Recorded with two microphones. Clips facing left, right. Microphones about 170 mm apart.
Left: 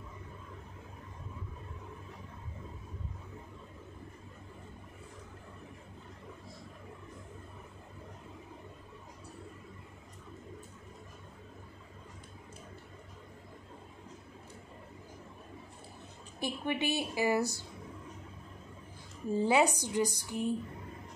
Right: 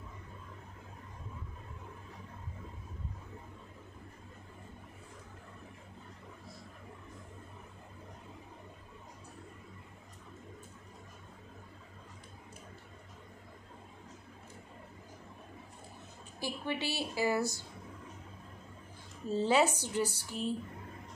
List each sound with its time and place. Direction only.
16.3 s a woman's voice: 20° left (ahead or behind)
19.2 s a woman's voice: 15° left (ahead or behind)